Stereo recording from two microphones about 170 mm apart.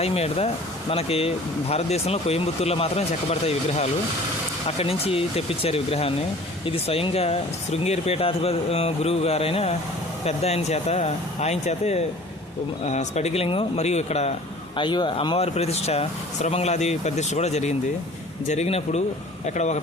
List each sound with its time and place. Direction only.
0.0 s speech: 35° left (ahead or behind)
14.8 s speech: 30° left (ahead or behind)